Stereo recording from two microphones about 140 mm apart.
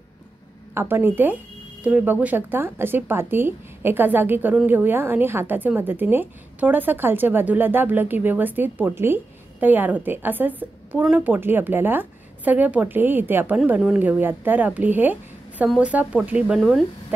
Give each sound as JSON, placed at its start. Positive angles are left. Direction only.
{"t": 0.7, "sound": "a woman's voice", "side_deg": -15}